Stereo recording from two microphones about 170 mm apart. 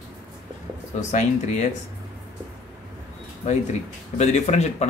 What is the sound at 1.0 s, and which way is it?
Speech, 45° left (ahead or behind).